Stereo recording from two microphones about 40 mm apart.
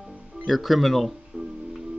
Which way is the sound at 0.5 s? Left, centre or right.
Centre.